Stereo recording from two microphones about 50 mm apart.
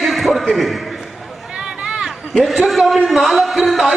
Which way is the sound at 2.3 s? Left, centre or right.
Centre.